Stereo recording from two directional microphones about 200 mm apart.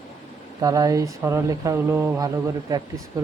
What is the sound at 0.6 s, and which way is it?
Speech, 15° right (ahead or behind).